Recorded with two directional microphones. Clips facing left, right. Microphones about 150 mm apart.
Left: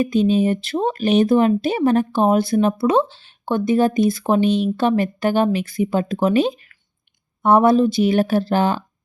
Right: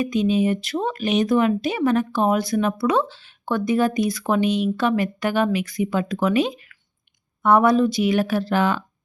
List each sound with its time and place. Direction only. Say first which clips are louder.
0.0 s speech: left 3 dB; 30° left (ahead or behind)